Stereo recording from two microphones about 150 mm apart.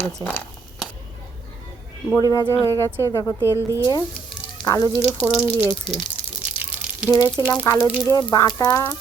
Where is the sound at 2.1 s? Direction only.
25° left (ahead or behind).